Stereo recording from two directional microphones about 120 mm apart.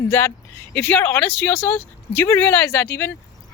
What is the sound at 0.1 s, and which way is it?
Speech, 20° left (ahead or behind).